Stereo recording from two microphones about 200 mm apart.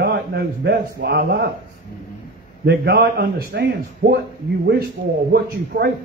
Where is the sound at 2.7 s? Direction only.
50° right (ahead or behind).